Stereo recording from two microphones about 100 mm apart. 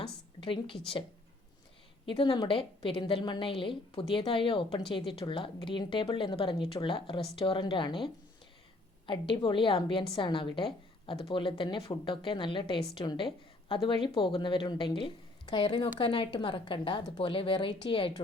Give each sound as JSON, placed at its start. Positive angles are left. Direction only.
{"t": 0.3, "sound": "a woman's voice", "side_deg": 60}
{"t": 2.0, "sound": "a woman's voice", "side_deg": 60}
{"t": 2.6, "sound": "a woman's voice", "side_deg": 65}